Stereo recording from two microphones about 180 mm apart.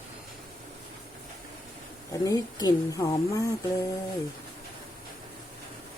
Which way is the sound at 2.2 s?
20° left (ahead or behind).